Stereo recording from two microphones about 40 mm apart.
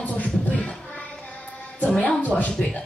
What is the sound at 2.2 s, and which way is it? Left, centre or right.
Speech, left.